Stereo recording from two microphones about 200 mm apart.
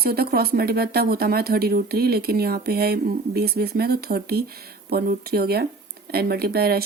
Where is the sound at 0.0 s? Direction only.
50° right (ahead or behind).